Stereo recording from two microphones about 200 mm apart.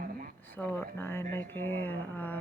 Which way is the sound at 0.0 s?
45° right (ahead or behind).